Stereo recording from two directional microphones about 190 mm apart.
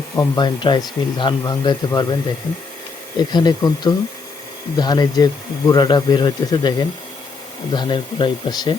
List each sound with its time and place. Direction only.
0.2 s speech: 25° left (ahead or behind)
3.2 s speech: 20° left (ahead or behind)